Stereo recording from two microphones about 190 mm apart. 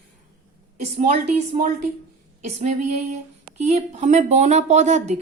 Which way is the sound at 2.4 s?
35° right (ahead or behind).